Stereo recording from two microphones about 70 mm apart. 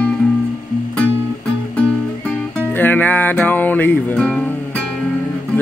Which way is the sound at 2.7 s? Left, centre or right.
Left.